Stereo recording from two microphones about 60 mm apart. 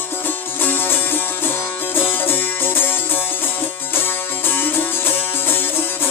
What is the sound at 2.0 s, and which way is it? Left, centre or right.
Music, left.